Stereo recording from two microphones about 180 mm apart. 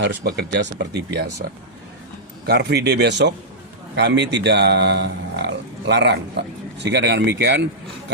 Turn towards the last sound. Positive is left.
turn(degrees=-75)  # may be behind; listen again after turning